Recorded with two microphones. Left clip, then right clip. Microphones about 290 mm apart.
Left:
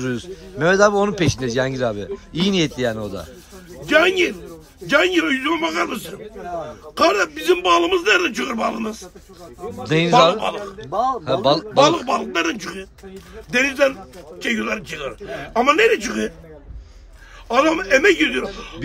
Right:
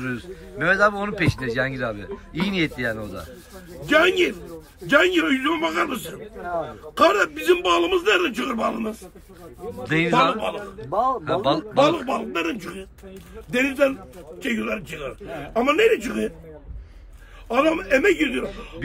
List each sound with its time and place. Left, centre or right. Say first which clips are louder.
0.0 s speech: left 4 dB; centre
17.5 s speech: left 4 dB; centre